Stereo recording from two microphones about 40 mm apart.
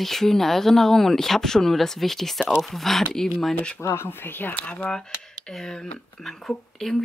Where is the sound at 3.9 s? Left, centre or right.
Left.